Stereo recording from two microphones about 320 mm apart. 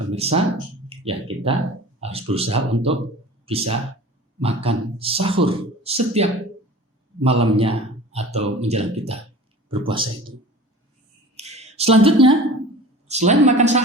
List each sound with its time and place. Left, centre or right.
0.1 s speech: centre
11.3 s a sound: centre
13.1 s speech: right